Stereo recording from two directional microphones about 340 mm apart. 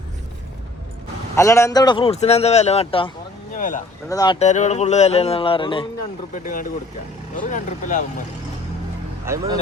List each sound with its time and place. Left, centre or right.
1.4 s a man's voice: centre
3.5 s a sound: left
4.1 s speech: centre
9.2 s speech: centre